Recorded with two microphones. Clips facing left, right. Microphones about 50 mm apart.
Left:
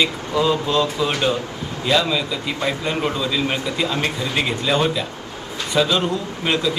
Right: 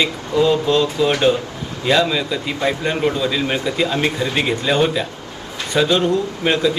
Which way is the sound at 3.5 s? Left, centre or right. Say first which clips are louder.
Right 3 dB; right.